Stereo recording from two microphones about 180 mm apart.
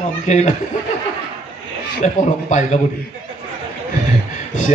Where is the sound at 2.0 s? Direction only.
40° left (ahead or behind).